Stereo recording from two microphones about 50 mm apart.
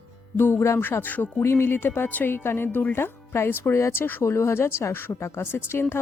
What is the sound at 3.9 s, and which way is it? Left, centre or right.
Speech, left.